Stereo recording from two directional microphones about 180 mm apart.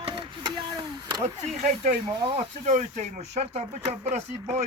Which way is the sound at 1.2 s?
50° right (ahead or behind).